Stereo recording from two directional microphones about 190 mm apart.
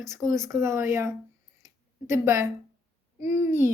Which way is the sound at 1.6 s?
15° right (ahead or behind).